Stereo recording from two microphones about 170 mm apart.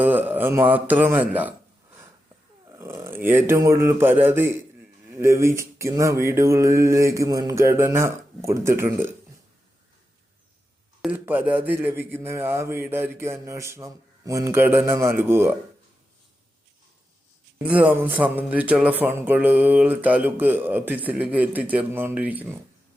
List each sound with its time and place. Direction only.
0.0 s speech: 10° right (ahead or behind)
2.7 s speech: 15° right (ahead or behind)
11.0 s speech: 10° right (ahead or behind)
17.6 s speech: 10° right (ahead or behind)